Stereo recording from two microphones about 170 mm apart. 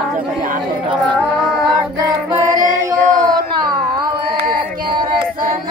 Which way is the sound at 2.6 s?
55° right (ahead or behind).